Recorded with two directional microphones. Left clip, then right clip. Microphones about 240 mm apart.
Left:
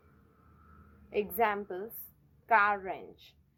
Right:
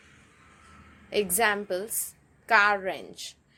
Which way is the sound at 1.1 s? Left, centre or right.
Right.